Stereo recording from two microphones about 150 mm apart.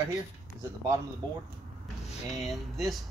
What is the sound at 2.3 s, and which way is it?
Speech, centre (ahead or behind).